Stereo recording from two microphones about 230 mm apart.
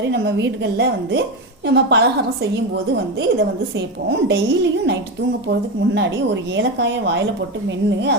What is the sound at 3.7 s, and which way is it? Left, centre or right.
A woman's voice, right.